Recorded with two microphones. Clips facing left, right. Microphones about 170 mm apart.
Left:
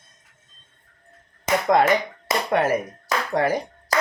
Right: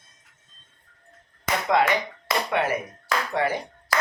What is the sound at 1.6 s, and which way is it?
Speech, 45° left (ahead or behind).